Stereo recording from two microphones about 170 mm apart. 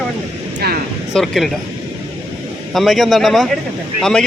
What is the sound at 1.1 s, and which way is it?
Speech, centre (ahead or behind).